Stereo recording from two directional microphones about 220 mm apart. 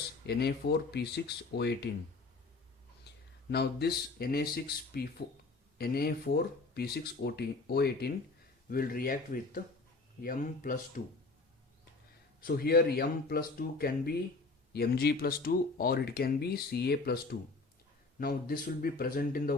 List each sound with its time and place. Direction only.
0.3 s speech: 45° left (ahead or behind)
3.5 s speech: 45° left (ahead or behind)
12.4 s speech: 45° left (ahead or behind)
18.2 s speech: 40° left (ahead or behind)